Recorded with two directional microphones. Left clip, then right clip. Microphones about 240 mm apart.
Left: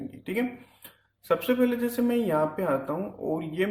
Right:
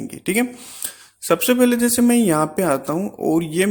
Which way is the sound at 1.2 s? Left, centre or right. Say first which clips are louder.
Right 8 dB; right.